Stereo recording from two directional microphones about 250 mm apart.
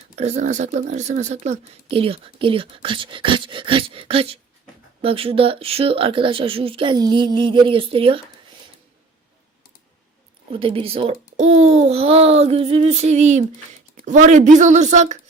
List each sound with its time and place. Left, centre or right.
0.2 s speech: right
10.5 s speech: right